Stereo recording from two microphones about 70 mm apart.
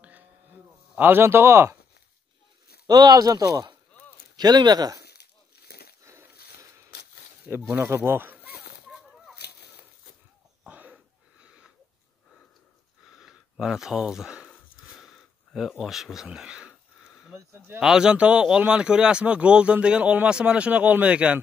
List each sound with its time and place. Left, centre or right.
0.9 s speech: right
2.9 s speech: right
4.4 s speech: right
7.7 s speech: right
10.7 s a sound: right
13.1 s a sound: centre
17.7 s speech: centre